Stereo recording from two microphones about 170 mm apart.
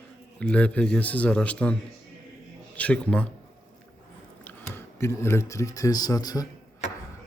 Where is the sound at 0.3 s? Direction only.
5° left (ahead or behind).